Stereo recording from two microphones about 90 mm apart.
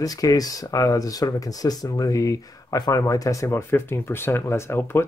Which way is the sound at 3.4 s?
30° left (ahead or behind).